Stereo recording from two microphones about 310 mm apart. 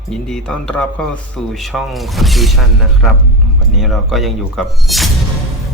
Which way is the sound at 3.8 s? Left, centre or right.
Centre.